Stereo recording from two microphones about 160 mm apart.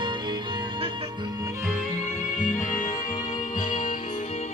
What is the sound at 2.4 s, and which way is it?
Music, 50° left (ahead or behind).